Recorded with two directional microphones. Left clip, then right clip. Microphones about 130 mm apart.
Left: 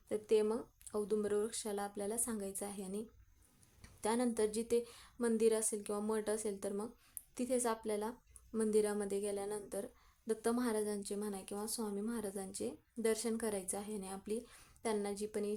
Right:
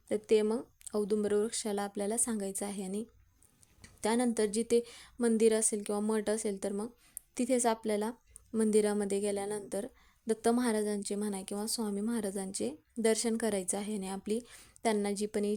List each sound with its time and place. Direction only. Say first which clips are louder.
0.1 s a woman's voice: right 5 dB; 45° right (ahead or behind)